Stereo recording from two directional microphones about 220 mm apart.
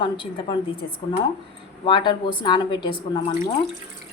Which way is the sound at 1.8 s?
20° left (ahead or behind).